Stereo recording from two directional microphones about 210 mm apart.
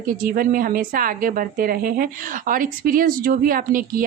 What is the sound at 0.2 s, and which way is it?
A woman's voice, 45° right (ahead or behind).